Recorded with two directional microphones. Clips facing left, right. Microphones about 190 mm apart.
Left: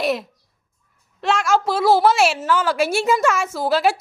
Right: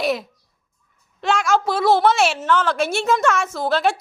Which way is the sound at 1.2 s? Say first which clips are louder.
Even; centre (ahead or behind).